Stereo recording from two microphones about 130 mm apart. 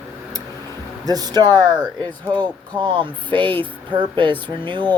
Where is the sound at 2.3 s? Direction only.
15° left (ahead or behind).